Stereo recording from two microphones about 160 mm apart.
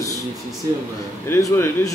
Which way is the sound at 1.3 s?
20° left (ahead or behind).